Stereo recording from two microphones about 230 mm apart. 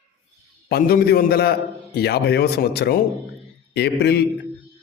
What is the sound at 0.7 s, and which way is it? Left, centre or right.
A man's voice, left.